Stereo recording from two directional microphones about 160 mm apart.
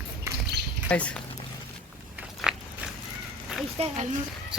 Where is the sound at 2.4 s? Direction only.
5° right (ahead or behind).